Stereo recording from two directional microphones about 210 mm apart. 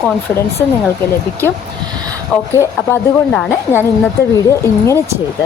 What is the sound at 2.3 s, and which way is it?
Speech, 10° left (ahead or behind).